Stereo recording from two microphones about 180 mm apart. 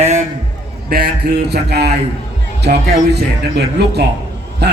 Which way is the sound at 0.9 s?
55° right (ahead or behind).